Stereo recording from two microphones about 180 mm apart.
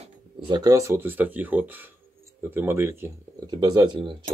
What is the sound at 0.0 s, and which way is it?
Speech, 25° right (ahead or behind).